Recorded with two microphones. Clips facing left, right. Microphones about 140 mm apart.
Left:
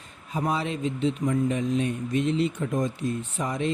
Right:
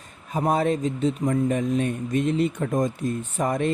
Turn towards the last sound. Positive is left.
turn(degrees=-50)  # may be behind; listen again after turning